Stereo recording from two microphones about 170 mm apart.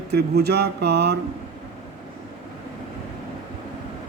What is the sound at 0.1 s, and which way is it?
A man's voice, 75° right (ahead or behind).